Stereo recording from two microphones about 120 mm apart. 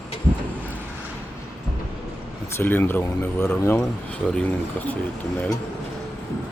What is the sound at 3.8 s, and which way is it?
Speech, 5° left (ahead or behind).